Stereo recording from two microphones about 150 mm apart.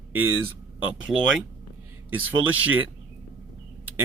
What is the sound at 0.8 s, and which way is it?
Speech, centre (ahead or behind).